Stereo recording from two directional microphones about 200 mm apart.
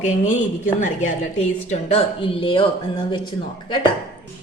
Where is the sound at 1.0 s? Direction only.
35° left (ahead or behind).